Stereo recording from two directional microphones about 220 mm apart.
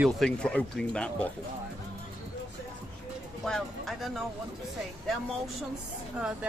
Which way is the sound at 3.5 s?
Centre (ahead or behind).